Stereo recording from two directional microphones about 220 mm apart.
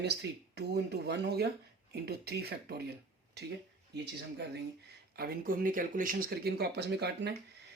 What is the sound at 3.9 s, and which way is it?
Speech, 50° right (ahead or behind).